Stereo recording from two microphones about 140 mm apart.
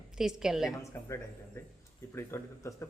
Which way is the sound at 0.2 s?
5° right (ahead or behind).